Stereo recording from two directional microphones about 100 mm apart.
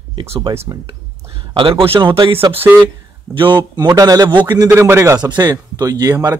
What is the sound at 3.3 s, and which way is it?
Speech, 55° right (ahead or behind).